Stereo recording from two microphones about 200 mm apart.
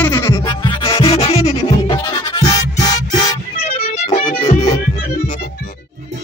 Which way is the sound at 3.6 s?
30° left (ahead or behind).